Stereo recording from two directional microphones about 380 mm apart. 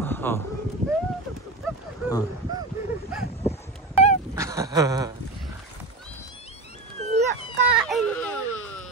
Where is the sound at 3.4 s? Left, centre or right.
Centre.